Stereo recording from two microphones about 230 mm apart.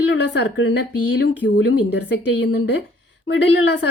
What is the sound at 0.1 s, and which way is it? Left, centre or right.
A woman's voice, left.